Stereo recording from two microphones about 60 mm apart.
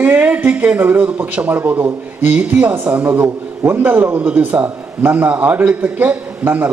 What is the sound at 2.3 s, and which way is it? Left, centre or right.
A man's voice, right.